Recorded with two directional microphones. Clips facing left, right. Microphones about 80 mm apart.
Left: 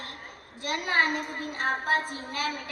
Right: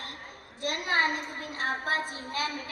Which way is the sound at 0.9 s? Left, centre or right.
Left.